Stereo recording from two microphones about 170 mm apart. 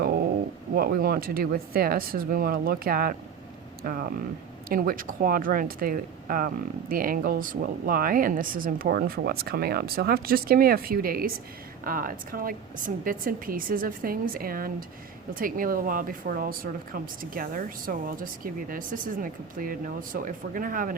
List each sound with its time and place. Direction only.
0.7 s speech: 60° right (ahead or behind)